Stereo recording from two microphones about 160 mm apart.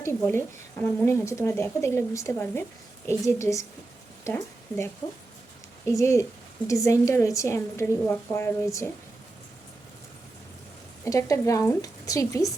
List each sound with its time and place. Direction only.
0.0 s a woman's voice: 15° left (ahead or behind)
5.8 s a woman's voice: 20° left (ahead or behind)
11.0 s a woman's voice: 20° left (ahead or behind)